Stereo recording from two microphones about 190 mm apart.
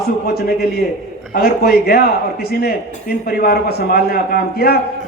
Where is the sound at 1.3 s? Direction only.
50° left (ahead or behind).